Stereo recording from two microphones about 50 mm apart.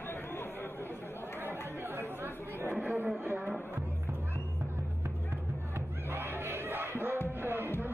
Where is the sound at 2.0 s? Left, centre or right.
Right.